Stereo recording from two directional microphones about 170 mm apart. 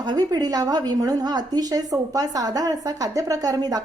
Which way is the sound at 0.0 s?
25° right (ahead or behind).